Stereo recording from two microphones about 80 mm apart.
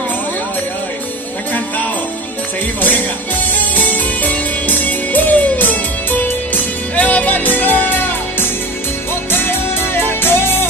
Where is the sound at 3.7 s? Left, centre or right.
Left.